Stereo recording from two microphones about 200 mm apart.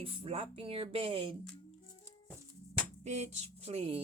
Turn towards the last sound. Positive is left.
turn(degrees=-30)  # may be behind; listen again after turning